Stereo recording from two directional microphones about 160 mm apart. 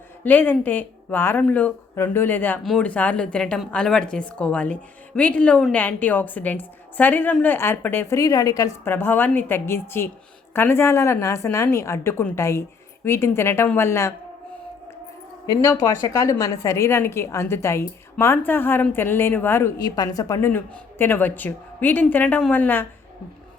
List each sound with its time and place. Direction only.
0.3 s a woman's voice: 10° left (ahead or behind)
15.4 s a woman's voice: 20° left (ahead or behind)